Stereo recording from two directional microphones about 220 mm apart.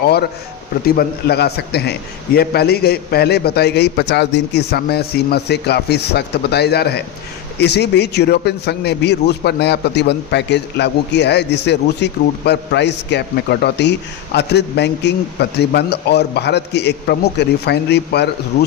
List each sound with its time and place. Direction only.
0.9 s a man's voice: 45° left (ahead or behind)